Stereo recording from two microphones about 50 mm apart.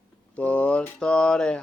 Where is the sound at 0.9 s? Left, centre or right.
Centre.